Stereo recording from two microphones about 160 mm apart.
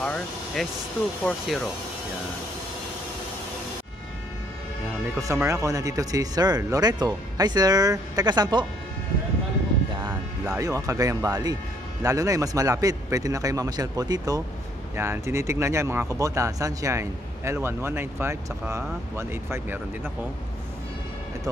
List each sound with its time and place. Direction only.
0.0 s speech: 5° left (ahead or behind)
5.3 s speech: 15° right (ahead or behind)
10.6 s speech: 20° right (ahead or behind)